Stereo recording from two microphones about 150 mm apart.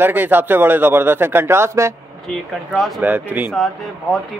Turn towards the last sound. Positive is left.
turn(degrees=0)  # may be behind; listen again after turning